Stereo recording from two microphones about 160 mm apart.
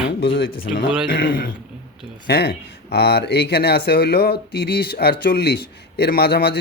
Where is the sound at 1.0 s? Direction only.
65° left (ahead or behind).